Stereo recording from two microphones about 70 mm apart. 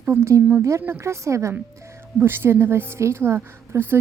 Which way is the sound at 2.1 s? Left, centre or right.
Right.